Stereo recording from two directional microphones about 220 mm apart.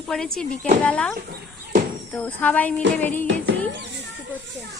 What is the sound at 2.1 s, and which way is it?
Speech, 5° left (ahead or behind).